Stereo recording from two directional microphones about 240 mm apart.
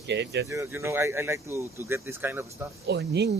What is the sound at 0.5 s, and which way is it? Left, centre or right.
Speech, centre.